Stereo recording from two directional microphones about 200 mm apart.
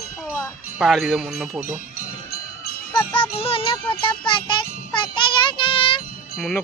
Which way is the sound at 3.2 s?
30° left (ahead or behind).